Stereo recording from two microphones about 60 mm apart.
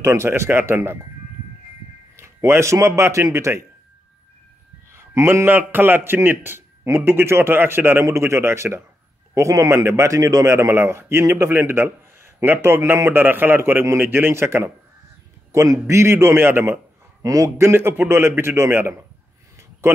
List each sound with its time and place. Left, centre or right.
0.0 s a man's voice: right
2.1 s a sound: right
3.0 s a man's voice: right
4.9 s a man's voice: right
8.0 s a man's voice: right
9.3 s a man's voice: right
15.5 s a man's voice: right
17.2 s a man's voice: right
17.6 s a man's voice: right